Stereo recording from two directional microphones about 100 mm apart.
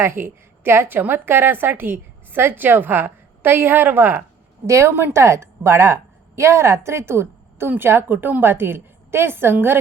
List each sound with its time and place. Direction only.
0.0 s a woman's voice: 25° right (ahead or behind)